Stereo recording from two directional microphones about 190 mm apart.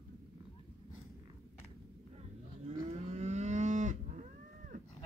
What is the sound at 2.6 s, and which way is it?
Moo, 35° right (ahead or behind).